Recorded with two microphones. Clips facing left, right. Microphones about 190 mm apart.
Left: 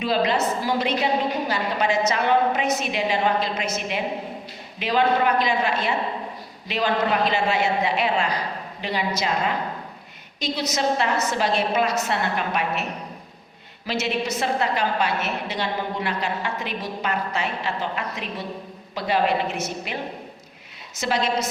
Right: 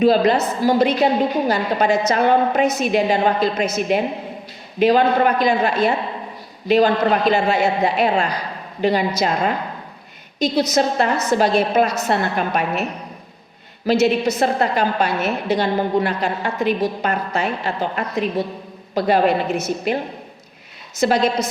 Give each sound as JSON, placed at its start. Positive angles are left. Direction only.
{"t": 0.0, "sound": "a woman's voice", "side_deg": -45}
{"t": 10.4, "sound": "a woman's voice", "side_deg": -40}
{"t": 13.8, "sound": "a woman's voice", "side_deg": -35}
{"t": 21.0, "sound": "a woman's voice", "side_deg": -40}